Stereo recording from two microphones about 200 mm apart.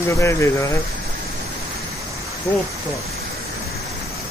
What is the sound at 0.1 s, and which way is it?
Speech, 15° left (ahead or behind).